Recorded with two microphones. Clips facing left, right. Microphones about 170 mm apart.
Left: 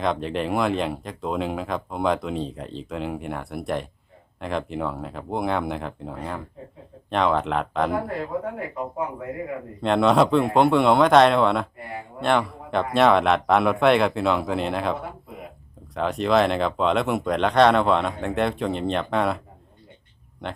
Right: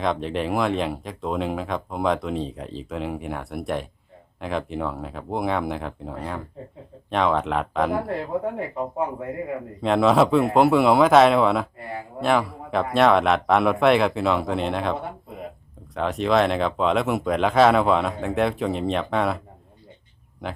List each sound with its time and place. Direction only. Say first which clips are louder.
0.0 s speech: even; centre (ahead or behind)
8.0 s speech: right 2 dB; 30° right (ahead or behind)
9.8 s speech: even; centre (ahead or behind)
16.0 s speech: even; centre (ahead or behind)
20.4 s speech: right 1 dB; 5° right (ahead or behind)